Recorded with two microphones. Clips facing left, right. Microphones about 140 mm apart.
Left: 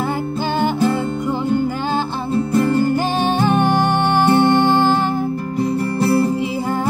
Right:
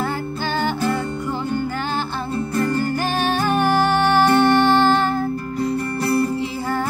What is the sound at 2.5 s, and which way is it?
Music, 20° left (ahead or behind).